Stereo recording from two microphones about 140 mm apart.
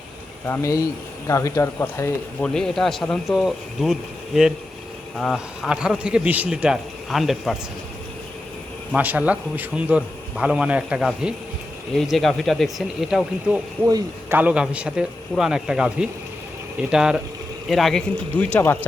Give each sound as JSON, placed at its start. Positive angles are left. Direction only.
{"t": 0.4, "sound": "speech", "side_deg": 20}
{"t": 2.4, "sound": "a man's voice", "side_deg": 5}
{"t": 5.1, "sound": "a man's voice", "side_deg": 0}
{"t": 9.0, "sound": "a man's voice", "side_deg": -10}
{"t": 13.8, "sound": "a man's voice", "side_deg": -20}